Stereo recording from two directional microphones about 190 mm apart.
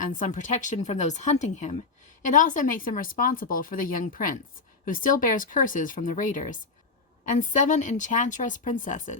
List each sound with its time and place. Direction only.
0.1 s a woman's voice: 40° left (ahead or behind)